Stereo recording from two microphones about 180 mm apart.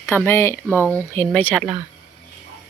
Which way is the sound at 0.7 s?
15° right (ahead or behind).